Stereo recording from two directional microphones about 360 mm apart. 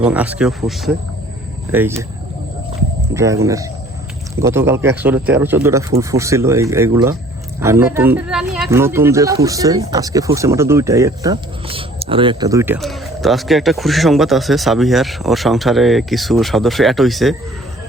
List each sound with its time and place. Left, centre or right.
0.0 s speech: centre
3.2 s speech: centre